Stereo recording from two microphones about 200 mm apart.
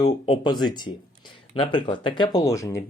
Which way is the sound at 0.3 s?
20° left (ahead or behind).